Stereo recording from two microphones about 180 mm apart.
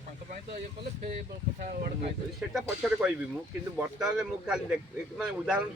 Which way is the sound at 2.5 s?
Centre (ahead or behind).